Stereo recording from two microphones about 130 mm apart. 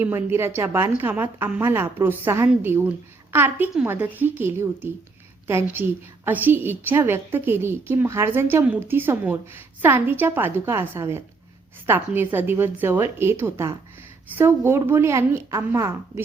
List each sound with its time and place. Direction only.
0.0 s a woman's voice: 20° right (ahead or behind)